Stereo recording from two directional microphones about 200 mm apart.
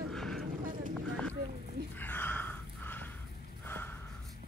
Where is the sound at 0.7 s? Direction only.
40° right (ahead or behind).